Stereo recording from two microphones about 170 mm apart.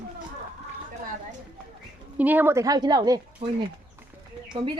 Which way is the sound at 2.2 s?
10° right (ahead or behind).